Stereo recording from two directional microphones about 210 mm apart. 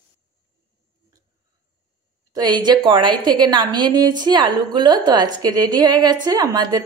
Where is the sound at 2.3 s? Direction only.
20° right (ahead or behind).